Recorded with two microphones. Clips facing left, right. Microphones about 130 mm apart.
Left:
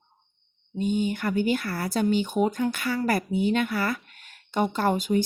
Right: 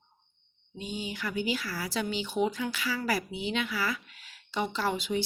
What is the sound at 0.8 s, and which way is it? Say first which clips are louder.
A woman's voice: left 11 dB; 50° left (ahead or behind).